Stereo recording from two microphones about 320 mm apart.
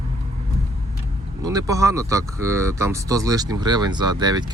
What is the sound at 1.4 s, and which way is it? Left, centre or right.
Speech, centre.